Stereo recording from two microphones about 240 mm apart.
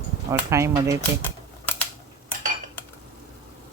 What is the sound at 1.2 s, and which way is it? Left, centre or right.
Typewriter, centre.